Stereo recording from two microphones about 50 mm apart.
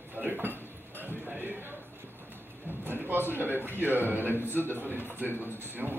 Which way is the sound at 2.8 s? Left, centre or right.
Right.